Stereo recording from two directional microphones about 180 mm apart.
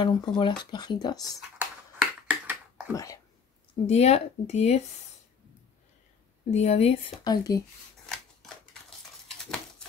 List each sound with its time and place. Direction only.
0.0 s speech: 25° left (ahead or behind)
1.6 s finger snapping: 10° right (ahead or behind)
2.9 s speech: 20° left (ahead or behind)
3.8 s speech: 35° left (ahead or behind)
6.5 s speech: 35° left (ahead or behind)
7.2 s speech: 20° left (ahead or behind)
8.1 s scissors: 5° left (ahead or behind)